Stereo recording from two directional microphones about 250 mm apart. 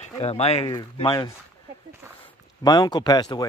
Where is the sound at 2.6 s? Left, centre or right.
Centre.